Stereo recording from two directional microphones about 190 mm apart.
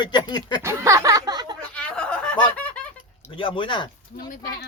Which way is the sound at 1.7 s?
5° left (ahead or behind).